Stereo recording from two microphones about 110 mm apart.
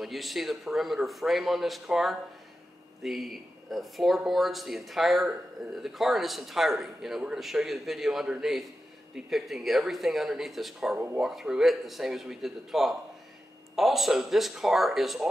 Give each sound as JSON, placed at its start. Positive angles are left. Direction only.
{"t": 0.0, "sound": "speech", "side_deg": 0}